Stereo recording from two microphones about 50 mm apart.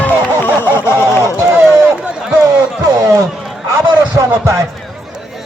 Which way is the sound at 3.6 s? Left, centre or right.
Right.